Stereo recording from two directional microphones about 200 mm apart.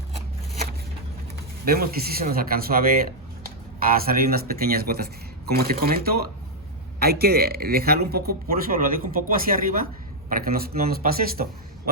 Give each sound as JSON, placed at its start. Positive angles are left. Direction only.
{"t": 1.6, "sound": "speech", "side_deg": -50}